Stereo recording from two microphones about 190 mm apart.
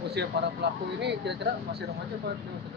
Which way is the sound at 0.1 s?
65° right (ahead or behind).